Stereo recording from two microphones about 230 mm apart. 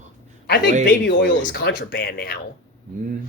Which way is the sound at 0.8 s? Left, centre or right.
Left.